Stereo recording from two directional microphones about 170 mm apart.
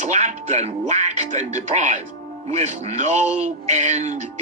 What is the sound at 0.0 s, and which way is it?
A man's voice, 45° right (ahead or behind).